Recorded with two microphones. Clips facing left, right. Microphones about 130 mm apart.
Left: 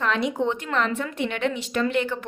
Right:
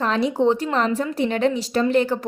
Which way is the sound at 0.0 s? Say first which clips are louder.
Right 5 dB; 35° right (ahead or behind).